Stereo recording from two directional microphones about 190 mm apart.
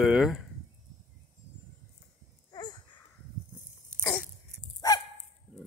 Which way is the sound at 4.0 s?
10° left (ahead or behind).